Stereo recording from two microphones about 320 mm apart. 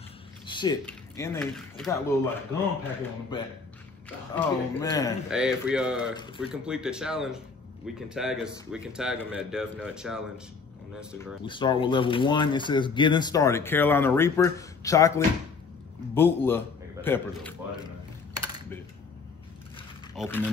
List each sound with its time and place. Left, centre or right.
0.5 s speech: centre
5.3 s speech: centre
6.1 s speech: centre
6.5 s speech: centre
11.1 s a man's voice: centre
20.2 s speech: centre